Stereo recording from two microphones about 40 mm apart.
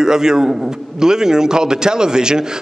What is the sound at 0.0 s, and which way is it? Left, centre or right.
A man's voice, centre.